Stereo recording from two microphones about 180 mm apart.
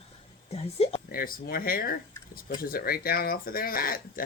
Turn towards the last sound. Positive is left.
turn(degrees=55)  # may be behind; listen again after turning